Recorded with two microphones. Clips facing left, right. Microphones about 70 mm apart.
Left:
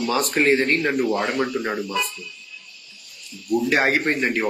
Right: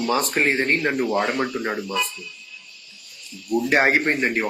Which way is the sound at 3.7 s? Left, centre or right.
Right.